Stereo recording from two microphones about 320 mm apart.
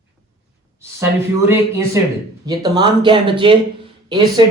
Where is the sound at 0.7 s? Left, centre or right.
Centre.